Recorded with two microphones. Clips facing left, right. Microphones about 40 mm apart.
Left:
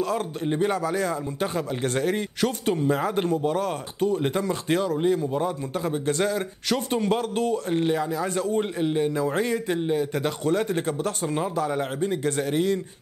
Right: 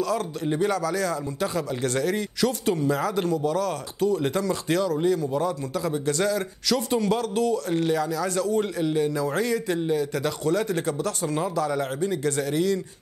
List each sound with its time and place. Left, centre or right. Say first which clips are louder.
0.6 s a man's voice: even; left